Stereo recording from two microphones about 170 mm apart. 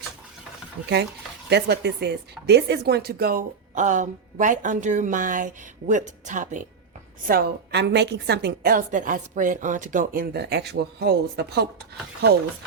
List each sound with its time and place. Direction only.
1.5 s speech: 75° right (ahead or behind); by 6.6 s 50° right (ahead or behind)
7.3 s a woman's voice: 65° right (ahead or behind)